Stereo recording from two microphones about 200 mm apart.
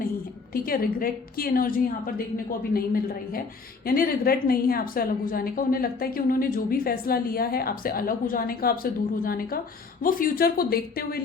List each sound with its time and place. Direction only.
0.5 s a woman's voice: 45° left (ahead or behind)